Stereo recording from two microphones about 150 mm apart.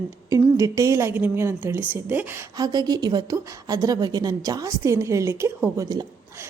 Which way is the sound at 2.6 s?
25° right (ahead or behind).